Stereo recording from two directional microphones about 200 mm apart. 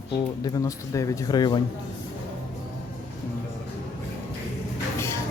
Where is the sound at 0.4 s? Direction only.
15° left (ahead or behind).